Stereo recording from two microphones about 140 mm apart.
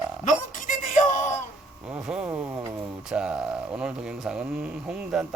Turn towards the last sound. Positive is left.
turn(degrees=-10)  # may be behind; listen again after turning